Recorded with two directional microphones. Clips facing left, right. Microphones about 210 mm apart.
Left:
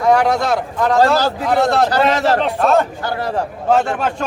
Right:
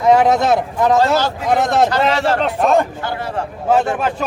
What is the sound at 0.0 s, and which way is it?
A man's voice, 20° right (ahead or behind).